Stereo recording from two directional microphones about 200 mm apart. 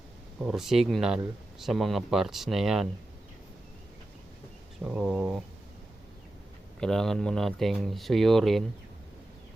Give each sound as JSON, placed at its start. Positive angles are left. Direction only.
{"t": 0.4, "sound": "speech", "side_deg": 0}
{"t": 4.8, "sound": "speech", "side_deg": 0}
{"t": 6.7, "sound": "speech", "side_deg": 0}